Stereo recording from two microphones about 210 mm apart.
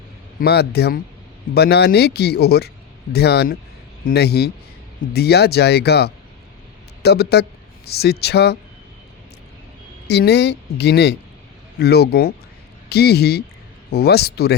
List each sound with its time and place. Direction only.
0.3 s speech: 50° left (ahead or behind)
10.1 s speech: 50° left (ahead or behind)